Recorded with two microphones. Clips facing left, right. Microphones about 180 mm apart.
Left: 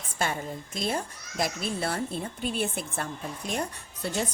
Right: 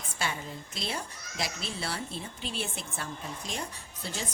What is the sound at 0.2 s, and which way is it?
Speech, 50° left (ahead or behind).